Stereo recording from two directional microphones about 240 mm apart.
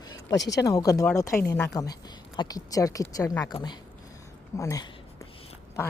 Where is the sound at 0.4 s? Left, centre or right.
Centre.